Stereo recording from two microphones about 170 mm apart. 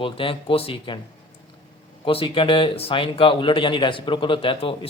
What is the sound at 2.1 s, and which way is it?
Speech, 30° left (ahead or behind).